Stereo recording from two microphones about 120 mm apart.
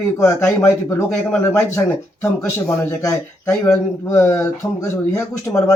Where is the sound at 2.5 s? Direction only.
20° left (ahead or behind).